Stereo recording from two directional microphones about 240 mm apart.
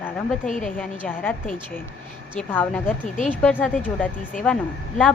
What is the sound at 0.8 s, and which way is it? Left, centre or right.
Speech, centre.